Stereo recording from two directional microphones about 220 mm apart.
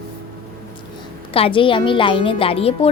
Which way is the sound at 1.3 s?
25° left (ahead or behind).